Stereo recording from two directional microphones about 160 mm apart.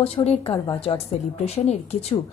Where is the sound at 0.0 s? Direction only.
40° left (ahead or behind).